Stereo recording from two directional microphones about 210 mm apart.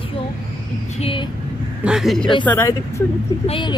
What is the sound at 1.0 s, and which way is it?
Speech, 25° left (ahead or behind).